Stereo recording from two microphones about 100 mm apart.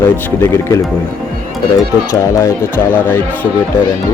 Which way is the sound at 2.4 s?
25° left (ahead or behind).